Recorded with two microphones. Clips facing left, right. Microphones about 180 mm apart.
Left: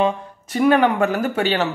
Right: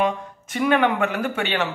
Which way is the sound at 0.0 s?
35° left (ahead or behind).